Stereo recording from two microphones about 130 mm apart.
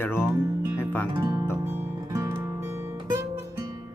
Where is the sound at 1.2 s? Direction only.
25° right (ahead or behind).